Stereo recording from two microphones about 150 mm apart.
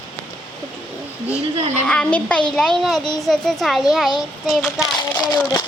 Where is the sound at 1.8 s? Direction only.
5° left (ahead or behind).